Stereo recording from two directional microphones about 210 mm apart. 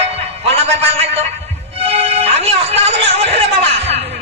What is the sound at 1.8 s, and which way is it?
Music, 30° right (ahead or behind).